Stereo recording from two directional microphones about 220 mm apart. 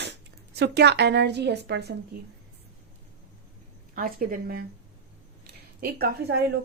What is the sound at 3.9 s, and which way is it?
Speech, 40° right (ahead or behind).